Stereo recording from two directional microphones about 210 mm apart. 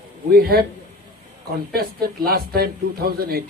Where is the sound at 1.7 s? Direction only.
45° right (ahead or behind).